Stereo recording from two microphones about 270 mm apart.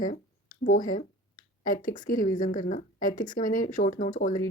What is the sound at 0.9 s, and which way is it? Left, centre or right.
Speech, left.